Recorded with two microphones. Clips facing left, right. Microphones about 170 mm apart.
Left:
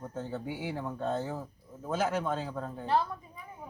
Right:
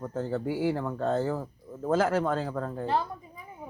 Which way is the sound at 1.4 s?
75° right (ahead or behind).